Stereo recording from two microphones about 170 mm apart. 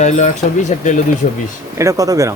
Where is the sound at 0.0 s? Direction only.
45° left (ahead or behind).